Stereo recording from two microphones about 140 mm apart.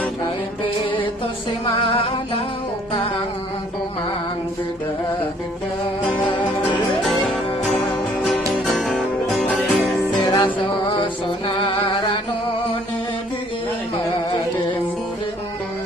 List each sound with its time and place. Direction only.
0.9 s music: 35° left (ahead or behind)
6.1 s music: 35° left (ahead or behind)
8.2 s music: centre (ahead or behind)
10.2 s music: 35° left (ahead or behind)